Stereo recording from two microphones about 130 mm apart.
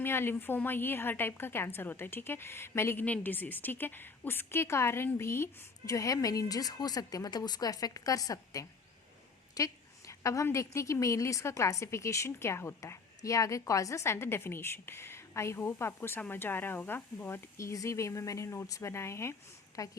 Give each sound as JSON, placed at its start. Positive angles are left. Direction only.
{"t": 0.0, "sound": "a woman's voice", "side_deg": 15}